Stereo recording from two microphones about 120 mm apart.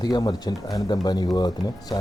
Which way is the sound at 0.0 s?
35° left (ahead or behind).